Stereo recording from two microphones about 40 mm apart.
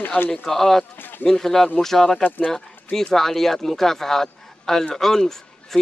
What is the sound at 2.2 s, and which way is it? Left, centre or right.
Speech, left.